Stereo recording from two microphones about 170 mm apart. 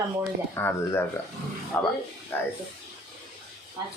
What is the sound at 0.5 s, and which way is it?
A man's voice, 15° left (ahead or behind).